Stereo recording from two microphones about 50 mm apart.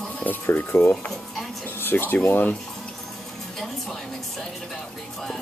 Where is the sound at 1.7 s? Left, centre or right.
Left.